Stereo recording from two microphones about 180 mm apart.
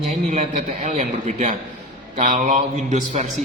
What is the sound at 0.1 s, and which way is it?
A man's voice, 45° right (ahead or behind).